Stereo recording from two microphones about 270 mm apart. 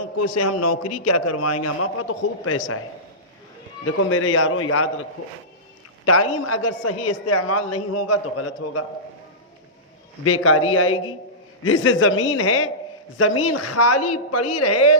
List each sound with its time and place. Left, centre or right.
0.6 s a man's voice: left
3.8 s a man's voice: left
6.4 s a man's voice: left
10.2 s a man's voice: left